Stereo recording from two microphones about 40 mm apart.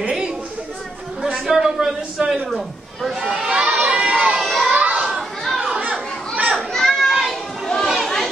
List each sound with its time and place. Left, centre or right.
1.2 s a sound: centre
2.5 s a man's voice: centre
3.2 s speech: right
3.8 s a sound: right
4.4 s children playing: centre
4.7 s children playing: right
5.1 s a sound: centre
5.8 s children playing: right
6.7 s children playing: centre
7.8 s chatter: centre